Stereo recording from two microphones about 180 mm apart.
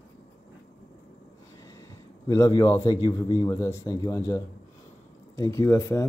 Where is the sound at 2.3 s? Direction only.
20° left (ahead or behind).